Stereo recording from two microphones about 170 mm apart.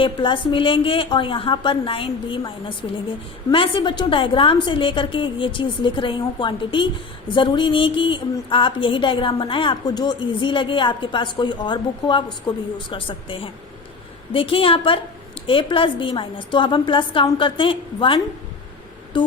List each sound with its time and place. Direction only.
0.0 s a woman's voice: 30° left (ahead or behind)